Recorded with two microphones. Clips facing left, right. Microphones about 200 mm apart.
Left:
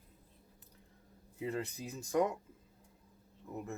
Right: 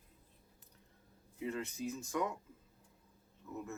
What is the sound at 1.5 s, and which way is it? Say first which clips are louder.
Speech: even; 35° left (ahead or behind).